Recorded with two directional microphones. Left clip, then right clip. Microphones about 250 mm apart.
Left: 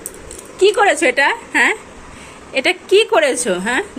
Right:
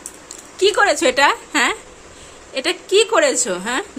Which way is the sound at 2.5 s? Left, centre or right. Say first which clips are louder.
Left 4 dB; centre.